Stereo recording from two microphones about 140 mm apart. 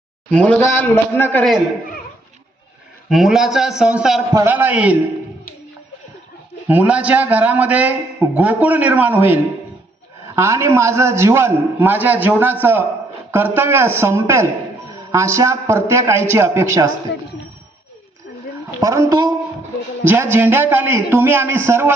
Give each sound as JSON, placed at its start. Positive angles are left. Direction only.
{"t": 0.3, "sound": "a man's voice", "side_deg": 10}
{"t": 3.1, "sound": "a man's voice", "side_deg": 0}
{"t": 6.7, "sound": "a man's voice", "side_deg": -10}
{"t": 18.8, "sound": "a man's voice", "side_deg": -25}
{"t": 20.3, "sound": "a man's voice", "side_deg": -15}